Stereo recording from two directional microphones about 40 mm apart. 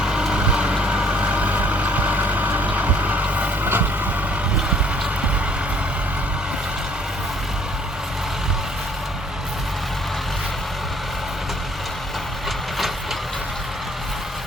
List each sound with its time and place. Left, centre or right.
0.0 s vehicle: right
3.6 s vehicle: right